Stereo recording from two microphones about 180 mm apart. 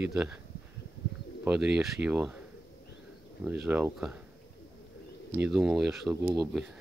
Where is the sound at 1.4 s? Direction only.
5° right (ahead or behind).